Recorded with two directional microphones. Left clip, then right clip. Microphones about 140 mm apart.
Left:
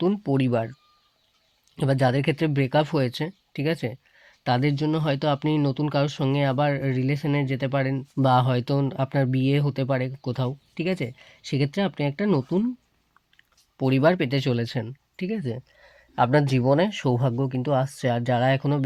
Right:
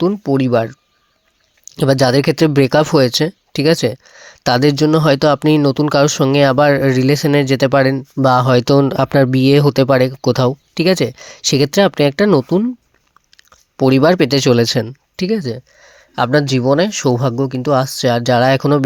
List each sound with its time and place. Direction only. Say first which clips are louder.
0.1 s speech: right 10 dB; 35° right (ahead or behind)
1.6 s speech: right 10 dB; 50° right (ahead or behind)
7.9 s speech: right 8 dB; 45° right (ahead or behind)
13.7 s speech: right 10 dB; 50° right (ahead or behind)
15.5 s speech: right 8 dB; 25° right (ahead or behind); by 18.8 s 55° right (ahead or behind)